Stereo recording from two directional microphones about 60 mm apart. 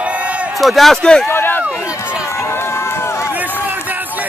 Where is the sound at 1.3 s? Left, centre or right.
Left.